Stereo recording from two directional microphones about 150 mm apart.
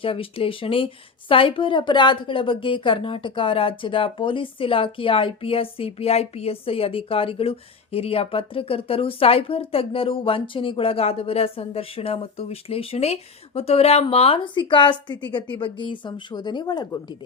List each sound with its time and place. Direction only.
0.0 s a woman's voice: 35° left (ahead or behind)